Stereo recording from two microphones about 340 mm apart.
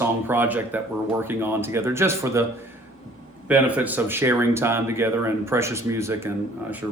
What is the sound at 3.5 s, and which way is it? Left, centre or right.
Speech, centre.